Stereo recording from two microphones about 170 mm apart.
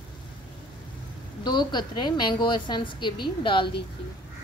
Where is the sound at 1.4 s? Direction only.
25° left (ahead or behind).